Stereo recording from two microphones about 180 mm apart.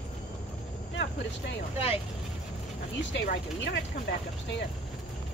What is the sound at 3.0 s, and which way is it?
Speech, 75° left (ahead or behind).